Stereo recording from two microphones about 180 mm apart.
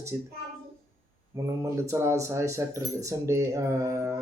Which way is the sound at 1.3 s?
15° right (ahead or behind).